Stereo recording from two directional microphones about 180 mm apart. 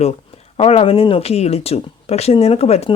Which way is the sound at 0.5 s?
30° left (ahead or behind).